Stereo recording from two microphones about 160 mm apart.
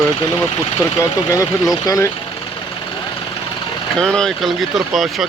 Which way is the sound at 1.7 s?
25° left (ahead or behind).